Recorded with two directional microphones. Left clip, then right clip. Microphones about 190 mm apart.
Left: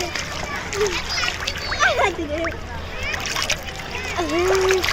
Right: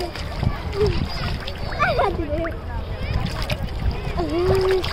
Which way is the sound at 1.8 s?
30° left (ahead or behind).